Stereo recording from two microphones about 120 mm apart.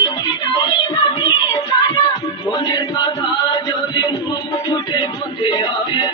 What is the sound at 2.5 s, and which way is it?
Chant, 35° left (ahead or behind).